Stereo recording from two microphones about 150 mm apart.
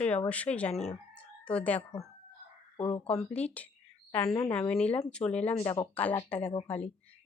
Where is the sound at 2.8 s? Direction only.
40° left (ahead or behind).